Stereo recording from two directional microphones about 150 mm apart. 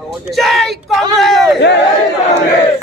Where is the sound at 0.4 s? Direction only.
Centre (ahead or behind).